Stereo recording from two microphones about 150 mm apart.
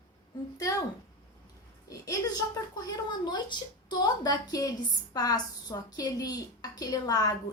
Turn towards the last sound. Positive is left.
turn(degrees=25)  # may be behind; listen again after turning